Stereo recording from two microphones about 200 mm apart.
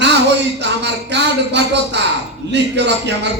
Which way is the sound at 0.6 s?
60° right (ahead or behind).